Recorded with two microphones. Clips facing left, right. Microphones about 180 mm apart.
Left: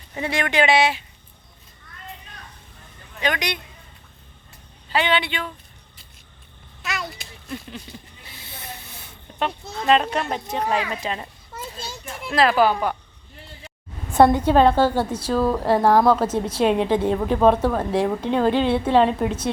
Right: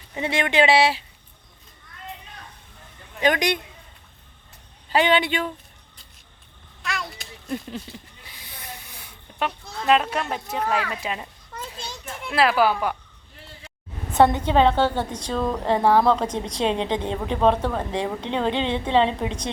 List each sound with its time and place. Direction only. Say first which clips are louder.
0.1 s speech: even; 25° right (ahead or behind)
3.2 s speech: right 4 dB; 45° right (ahead or behind)
4.9 s speech: right 2 dB; 45° right (ahead or behind)
6.8 s a sound: left 1 dB; centre (ahead or behind)
7.4 s a sound: right 4 dB; 45° right (ahead or behind)
8.4 s snake: left 2 dB; 15° right (ahead or behind)
9.8 s speech: left 1 dB; 5° right (ahead or behind)
11.8 s children playing: left 1 dB; 5° left (ahead or behind)
12.3 s speech: left 2 dB; 10° right (ahead or behind)
14.1 s a woman's voice: left 3 dB; 10° left (ahead or behind)